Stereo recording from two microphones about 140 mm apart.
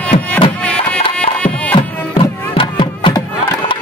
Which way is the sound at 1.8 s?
40° left (ahead or behind).